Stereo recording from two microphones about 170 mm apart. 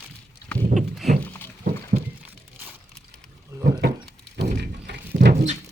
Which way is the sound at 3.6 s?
60° right (ahead or behind).